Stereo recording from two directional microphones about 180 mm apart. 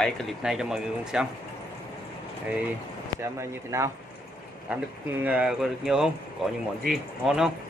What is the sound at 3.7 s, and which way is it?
Speech, 15° right (ahead or behind).